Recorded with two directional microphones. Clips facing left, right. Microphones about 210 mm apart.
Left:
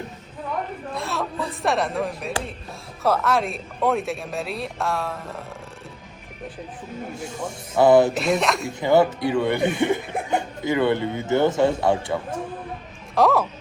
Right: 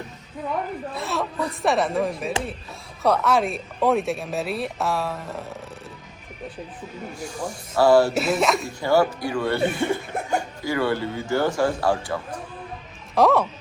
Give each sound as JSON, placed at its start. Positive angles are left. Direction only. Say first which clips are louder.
{"t": 0.9, "sound": "speech", "louder": "even", "side_deg": 0}
{"t": 7.3, "sound": "speech", "louder": "even", "side_deg": 25}
{"t": 8.1, "sound": "speech", "louder": "right 1 dB", "side_deg": 0}
{"t": 8.8, "sound": "speech", "louder": "left 3 dB", "side_deg": 20}
{"t": 13.1, "sound": "speech", "louder": "right 1 dB", "side_deg": 0}